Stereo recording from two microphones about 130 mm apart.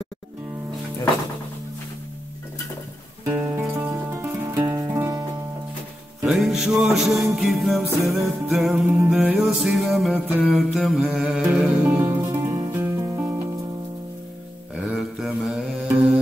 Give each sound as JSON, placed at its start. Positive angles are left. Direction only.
{"t": 3.3, "sound": "music", "side_deg": -15}
{"t": 6.2, "sound": "music", "side_deg": -5}
{"t": 11.9, "sound": "music", "side_deg": -20}
{"t": 14.8, "sound": "mantra", "side_deg": -5}